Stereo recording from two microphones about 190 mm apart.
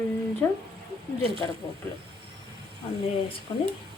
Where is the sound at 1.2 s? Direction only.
30° right (ahead or behind).